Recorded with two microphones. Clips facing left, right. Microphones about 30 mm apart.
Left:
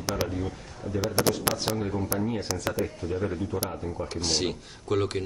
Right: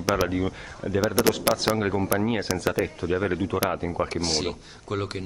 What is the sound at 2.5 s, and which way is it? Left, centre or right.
Speech, right.